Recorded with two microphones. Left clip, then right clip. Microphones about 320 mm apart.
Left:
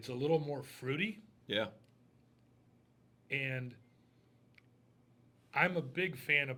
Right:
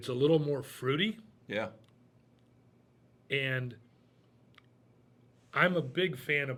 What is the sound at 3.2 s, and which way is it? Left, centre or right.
Speech, right.